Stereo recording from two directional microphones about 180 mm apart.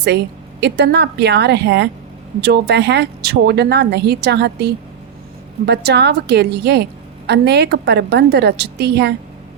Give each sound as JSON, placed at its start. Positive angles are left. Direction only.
{"t": 0.6, "sound": "a woman's voice", "side_deg": -70}